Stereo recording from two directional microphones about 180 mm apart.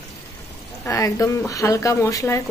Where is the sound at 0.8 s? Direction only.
15° left (ahead or behind).